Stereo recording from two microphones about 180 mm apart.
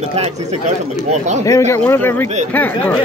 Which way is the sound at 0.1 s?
40° right (ahead or behind).